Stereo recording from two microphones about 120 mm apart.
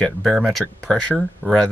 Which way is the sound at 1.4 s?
15° right (ahead or behind).